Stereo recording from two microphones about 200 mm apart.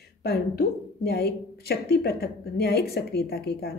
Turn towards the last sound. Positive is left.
turn(degrees=50)  # may be behind; listen again after turning